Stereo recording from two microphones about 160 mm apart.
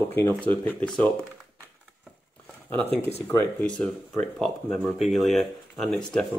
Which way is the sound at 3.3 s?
15° left (ahead or behind).